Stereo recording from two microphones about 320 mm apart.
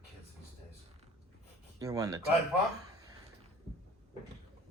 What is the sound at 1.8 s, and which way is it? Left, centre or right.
Speech, centre.